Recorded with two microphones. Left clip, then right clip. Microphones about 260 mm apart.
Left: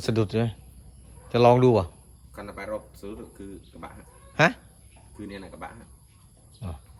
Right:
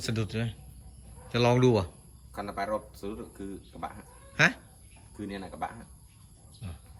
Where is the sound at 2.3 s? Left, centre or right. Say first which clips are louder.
Right 2 dB; centre.